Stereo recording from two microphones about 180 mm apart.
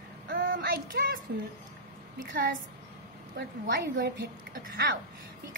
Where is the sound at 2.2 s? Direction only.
50° right (ahead or behind).